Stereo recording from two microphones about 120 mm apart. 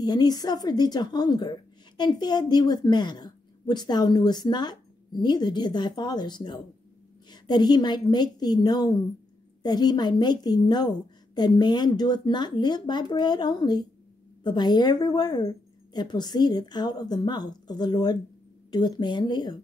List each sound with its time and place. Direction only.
0.0 s a woman's voice: 35° left (ahead or behind)